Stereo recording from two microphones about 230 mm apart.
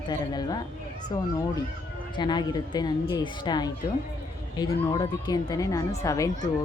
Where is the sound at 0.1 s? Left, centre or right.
Centre.